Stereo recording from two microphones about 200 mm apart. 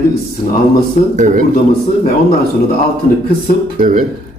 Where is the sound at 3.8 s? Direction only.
40° right (ahead or behind).